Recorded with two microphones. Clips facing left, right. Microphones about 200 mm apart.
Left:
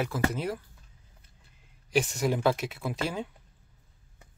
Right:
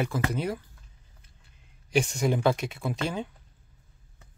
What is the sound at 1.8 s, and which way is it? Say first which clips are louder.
Speech: right 1 dB; 5° left (ahead or behind).